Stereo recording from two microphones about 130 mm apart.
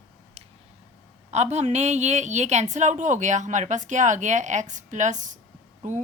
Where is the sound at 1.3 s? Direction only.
60° right (ahead or behind).